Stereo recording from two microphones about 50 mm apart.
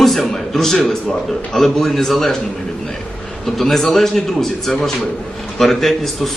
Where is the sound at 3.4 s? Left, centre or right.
Centre.